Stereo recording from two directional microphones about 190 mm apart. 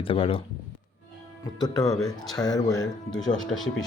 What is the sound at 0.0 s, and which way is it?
Speech, 30° left (ahead or behind).